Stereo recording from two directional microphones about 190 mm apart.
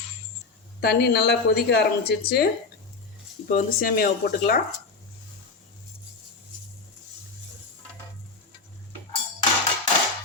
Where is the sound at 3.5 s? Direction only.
45° left (ahead or behind).